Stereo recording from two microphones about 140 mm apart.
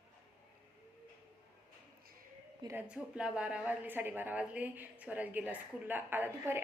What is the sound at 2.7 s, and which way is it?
A woman's voice, 5° right (ahead or behind).